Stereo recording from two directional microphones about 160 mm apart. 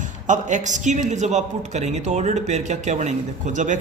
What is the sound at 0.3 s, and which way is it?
Speech, 50° right (ahead or behind).